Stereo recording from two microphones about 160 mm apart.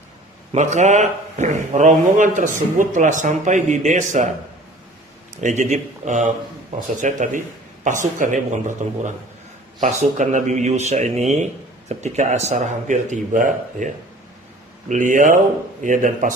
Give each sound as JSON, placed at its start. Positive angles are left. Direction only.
{"t": 0.5, "sound": "speech", "side_deg": -45}
{"t": 5.4, "sound": "speech", "side_deg": -45}